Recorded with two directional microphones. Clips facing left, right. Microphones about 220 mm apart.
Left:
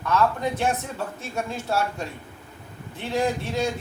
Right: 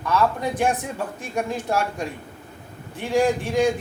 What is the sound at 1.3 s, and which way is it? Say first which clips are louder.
A man's voice: right 3 dB; 15° right (ahead or behind).